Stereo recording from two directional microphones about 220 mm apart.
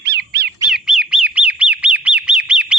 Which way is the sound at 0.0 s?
50° right (ahead or behind).